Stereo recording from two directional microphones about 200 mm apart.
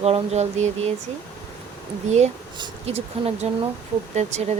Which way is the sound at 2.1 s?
35° right (ahead or behind).